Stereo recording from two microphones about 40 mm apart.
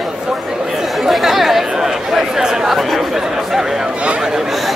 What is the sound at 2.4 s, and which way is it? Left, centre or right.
Chatter, centre.